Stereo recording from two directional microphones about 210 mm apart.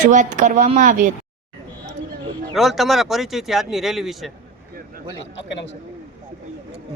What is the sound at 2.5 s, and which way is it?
Speech, centre (ahead or behind).